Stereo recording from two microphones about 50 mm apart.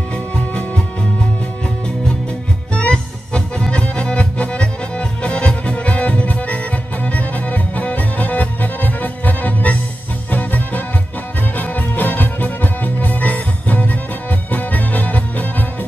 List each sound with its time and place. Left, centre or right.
2.7 s music: left